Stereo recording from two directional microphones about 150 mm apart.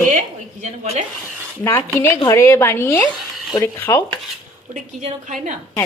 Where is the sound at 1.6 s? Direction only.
20° left (ahead or behind).